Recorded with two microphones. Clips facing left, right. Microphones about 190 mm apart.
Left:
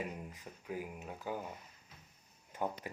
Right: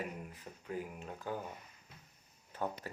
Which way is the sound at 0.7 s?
5° left (ahead or behind).